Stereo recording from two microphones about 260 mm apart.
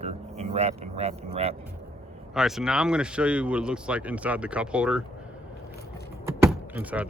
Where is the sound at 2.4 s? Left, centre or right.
Centre.